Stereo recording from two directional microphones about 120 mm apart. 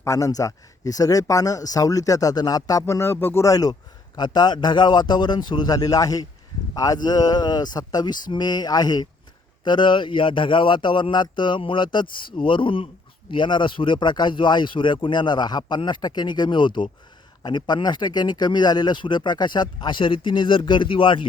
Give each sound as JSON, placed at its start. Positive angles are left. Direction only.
{"t": 0.0, "sound": "speech", "side_deg": 25}